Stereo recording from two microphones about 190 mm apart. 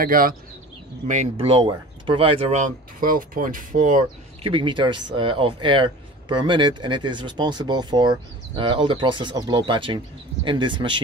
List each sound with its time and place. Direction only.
0.0 s speech: 50° right (ahead or behind)
1.0 s speech: 40° right (ahead or behind)
4.4 s speech: 25° right (ahead or behind)